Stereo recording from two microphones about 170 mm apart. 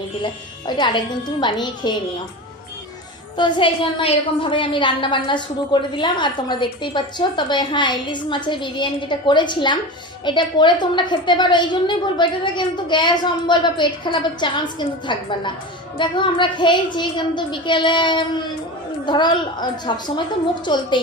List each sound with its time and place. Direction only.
0.8 s a woman's voice: 25° left (ahead or behind)
3.3 s a woman's voice: 25° left (ahead or behind)